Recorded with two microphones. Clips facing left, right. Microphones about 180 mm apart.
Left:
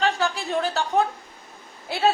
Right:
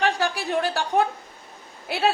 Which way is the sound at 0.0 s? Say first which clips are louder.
Even; 15° right (ahead or behind).